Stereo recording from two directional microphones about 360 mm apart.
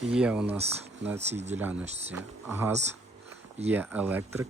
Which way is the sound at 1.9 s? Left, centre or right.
Centre.